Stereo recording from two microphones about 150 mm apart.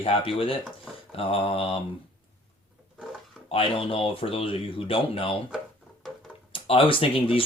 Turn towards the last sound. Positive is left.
turn(degrees=35)  # may be behind; listen again after turning